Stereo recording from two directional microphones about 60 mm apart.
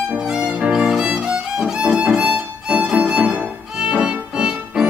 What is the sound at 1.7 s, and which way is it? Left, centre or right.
Violin, centre.